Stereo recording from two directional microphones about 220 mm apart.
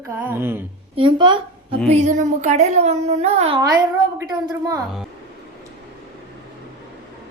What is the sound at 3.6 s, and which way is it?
A woman's voice, 15° right (ahead or behind).